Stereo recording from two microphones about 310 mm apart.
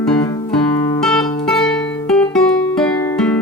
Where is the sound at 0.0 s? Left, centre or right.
Centre.